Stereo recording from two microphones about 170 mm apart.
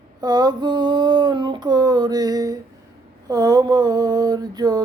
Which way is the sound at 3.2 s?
20° right (ahead or behind).